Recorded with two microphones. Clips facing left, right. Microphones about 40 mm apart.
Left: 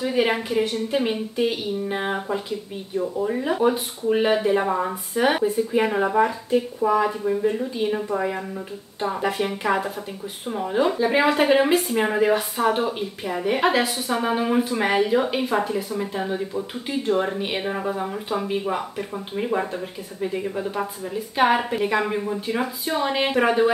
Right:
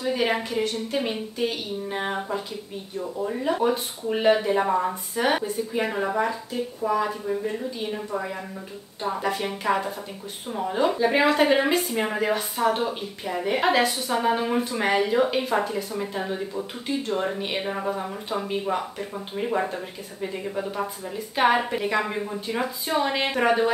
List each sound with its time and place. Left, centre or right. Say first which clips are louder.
0.0 s speech: left 3 dB; centre
9.1 s speech: left 2 dB; centre